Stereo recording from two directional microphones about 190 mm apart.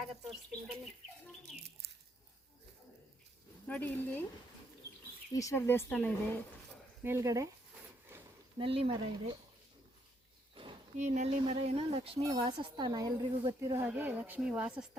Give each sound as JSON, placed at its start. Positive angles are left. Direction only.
{"t": 0.0, "sound": "speech", "side_deg": 0}
{"t": 3.7, "sound": "speech", "side_deg": 10}
{"t": 5.3, "sound": "speech", "side_deg": 15}
{"t": 7.0, "sound": "speech", "side_deg": -15}
{"t": 8.1, "sound": "a sound", "side_deg": -10}
{"t": 8.5, "sound": "speech", "side_deg": -30}
{"t": 10.5, "sound": "a sound", "side_deg": -25}
{"t": 10.9, "sound": "speech", "side_deg": -40}
{"t": 12.2, "sound": "speech", "side_deg": -20}